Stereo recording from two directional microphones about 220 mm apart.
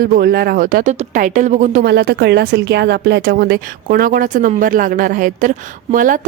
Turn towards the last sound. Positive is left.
turn(degrees=-35)  # may be behind; listen again after turning